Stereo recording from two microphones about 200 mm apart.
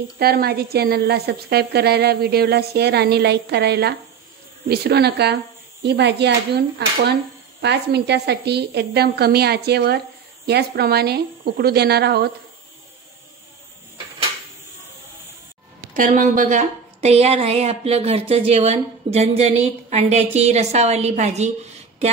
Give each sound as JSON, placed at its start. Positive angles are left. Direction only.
{"t": 0.2, "sound": "a woman's voice", "side_deg": -50}
{"t": 15.9, "sound": "a woman's voice", "side_deg": -40}